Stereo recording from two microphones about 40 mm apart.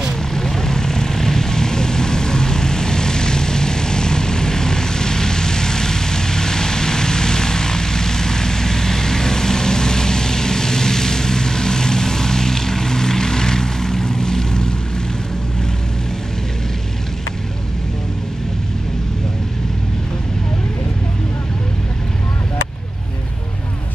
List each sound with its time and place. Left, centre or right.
0.3 s vehicle: centre